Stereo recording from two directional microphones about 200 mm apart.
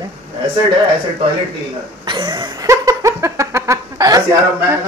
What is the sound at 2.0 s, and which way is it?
Laughter, 20° right (ahead or behind).